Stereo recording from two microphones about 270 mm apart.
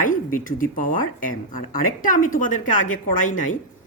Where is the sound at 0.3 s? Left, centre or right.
Left.